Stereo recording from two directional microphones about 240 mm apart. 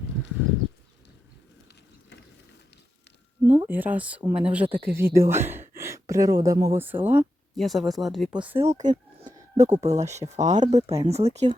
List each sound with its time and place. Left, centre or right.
3.4 s speech: centre
4.2 s speech: right
4.5 s speech: centre
8.7 s a sound: right
9.8 s speech: right